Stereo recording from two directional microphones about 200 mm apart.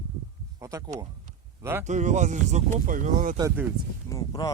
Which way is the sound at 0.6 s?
15° right (ahead or behind).